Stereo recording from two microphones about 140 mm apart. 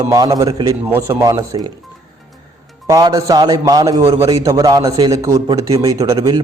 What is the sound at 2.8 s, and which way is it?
A man's voice, 25° right (ahead or behind).